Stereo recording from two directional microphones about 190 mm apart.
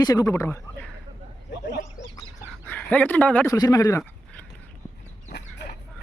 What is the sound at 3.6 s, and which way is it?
Speech, 20° left (ahead or behind).